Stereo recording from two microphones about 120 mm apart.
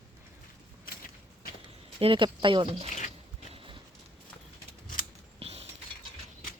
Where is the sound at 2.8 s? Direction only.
90° left.